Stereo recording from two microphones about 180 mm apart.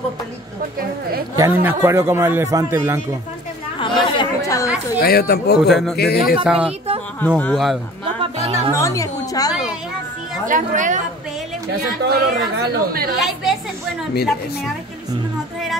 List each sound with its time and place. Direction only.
1.3 s a man's voice: 15° right (ahead or behind)
3.8 s chatter: 25° left (ahead or behind)
5.0 s speech: 60° left (ahead or behind)
5.7 s a woman's voice: centre (ahead or behind)
5.9 s speech: 60° left (ahead or behind)
6.4 s a woman's voice: 5° right (ahead or behind)
7.2 s speech: 10° left (ahead or behind)
7.5 s a woman's voice: centre (ahead or behind)
8.2 s music: 30° right (ahead or behind)
8.7 s a woman's voice: 15° left (ahead or behind)
10.4 s speech: 45° right (ahead or behind)
12.0 s speech: 60° right (ahead or behind)
13.2 s a woman's voice: centre (ahead or behind)